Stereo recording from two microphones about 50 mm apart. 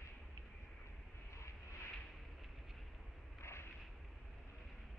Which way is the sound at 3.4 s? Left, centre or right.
Left.